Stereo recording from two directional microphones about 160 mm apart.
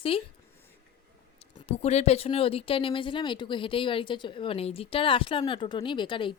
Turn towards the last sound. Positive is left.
turn(degrees=30)  # may be behind; listen again after turning